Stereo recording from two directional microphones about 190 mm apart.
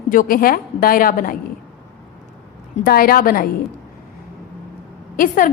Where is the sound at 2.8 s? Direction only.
50° left (ahead or behind).